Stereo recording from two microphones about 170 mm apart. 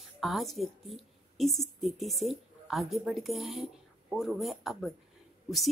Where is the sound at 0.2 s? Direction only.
Centre (ahead or behind).